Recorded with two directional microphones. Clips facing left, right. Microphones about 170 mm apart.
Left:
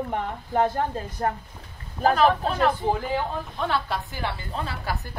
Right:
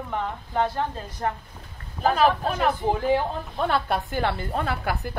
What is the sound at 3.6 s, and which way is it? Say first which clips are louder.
Speech: right 3 dB; 55° right (ahead or behind).